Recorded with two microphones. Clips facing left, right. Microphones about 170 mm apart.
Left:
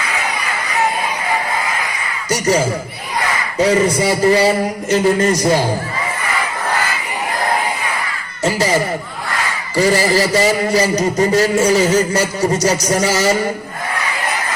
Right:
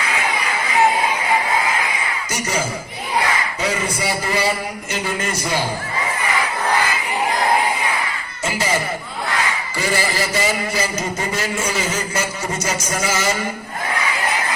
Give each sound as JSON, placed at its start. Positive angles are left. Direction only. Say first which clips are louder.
{"t": 3.6, "sound": "a man's voice", "louder": "left 14 dB", "side_deg": 35}
{"t": 8.4, "sound": "a sound", "louder": "left 6 dB", "side_deg": 35}
{"t": 9.7, "sound": "a man's voice", "louder": "left 9 dB", "side_deg": 40}